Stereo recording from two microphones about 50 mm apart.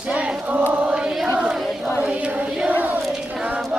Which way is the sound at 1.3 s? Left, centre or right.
Centre.